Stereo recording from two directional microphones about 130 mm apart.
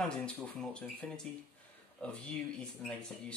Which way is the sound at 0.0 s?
5° left (ahead or behind).